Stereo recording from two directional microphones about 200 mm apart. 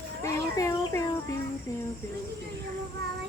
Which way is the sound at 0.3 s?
15° left (ahead or behind).